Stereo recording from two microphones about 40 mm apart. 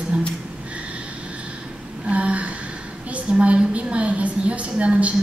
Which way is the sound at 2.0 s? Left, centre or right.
Right.